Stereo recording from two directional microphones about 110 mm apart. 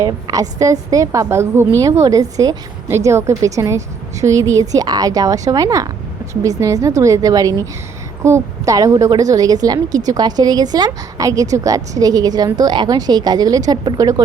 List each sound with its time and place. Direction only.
0.0 s a woman's voice: 30° right (ahead or behind)